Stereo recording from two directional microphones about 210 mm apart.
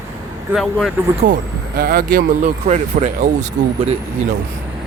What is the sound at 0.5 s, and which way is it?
Speech, centre (ahead or behind).